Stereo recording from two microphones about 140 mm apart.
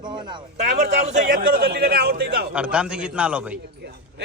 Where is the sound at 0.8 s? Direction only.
55° right (ahead or behind); by 2.4 s 90° right.